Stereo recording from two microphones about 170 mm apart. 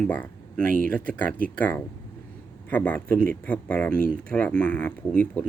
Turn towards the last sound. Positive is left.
turn(degrees=10)  # may be behind; listen again after turning